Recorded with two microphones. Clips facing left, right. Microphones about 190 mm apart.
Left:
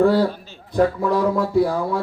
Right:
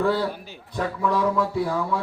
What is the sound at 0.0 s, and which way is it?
Speech, 40° left (ahead or behind).